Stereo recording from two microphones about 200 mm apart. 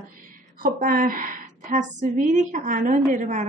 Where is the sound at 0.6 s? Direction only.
45° right (ahead or behind).